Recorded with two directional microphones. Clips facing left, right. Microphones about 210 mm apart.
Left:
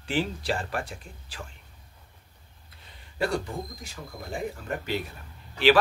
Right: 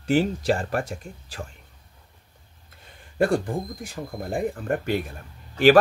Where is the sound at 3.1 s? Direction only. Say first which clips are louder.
Right 6 dB; 50° right (ahead or behind).